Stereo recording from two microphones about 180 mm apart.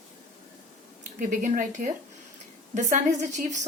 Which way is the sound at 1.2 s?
45° right (ahead or behind).